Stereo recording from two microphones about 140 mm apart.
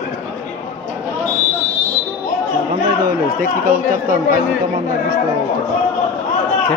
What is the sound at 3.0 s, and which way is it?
Speech, 70° right (ahead or behind).